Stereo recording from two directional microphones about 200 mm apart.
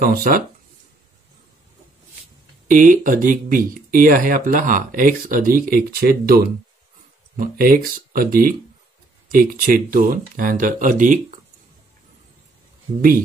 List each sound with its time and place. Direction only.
0.0 s speech: 45° right (ahead or behind)
2.7 s speech: 40° right (ahead or behind)